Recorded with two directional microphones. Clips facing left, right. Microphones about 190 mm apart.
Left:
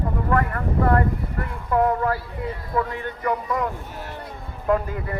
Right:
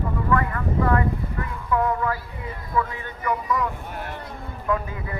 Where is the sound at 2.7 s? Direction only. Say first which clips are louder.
Even; 45° left (ahead or behind).